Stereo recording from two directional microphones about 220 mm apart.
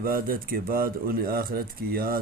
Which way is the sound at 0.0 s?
40° right (ahead or behind).